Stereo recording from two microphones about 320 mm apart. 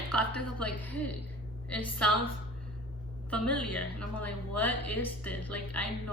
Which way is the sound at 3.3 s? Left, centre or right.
Centre.